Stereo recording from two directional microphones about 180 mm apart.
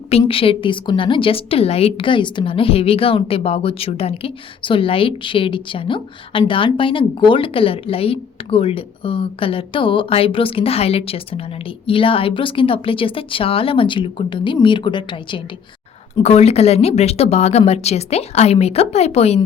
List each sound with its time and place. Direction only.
0.1 s speech: 30° left (ahead or behind)